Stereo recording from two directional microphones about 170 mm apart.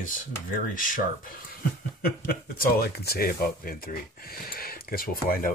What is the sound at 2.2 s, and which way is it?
Speech, 60° left (ahead or behind).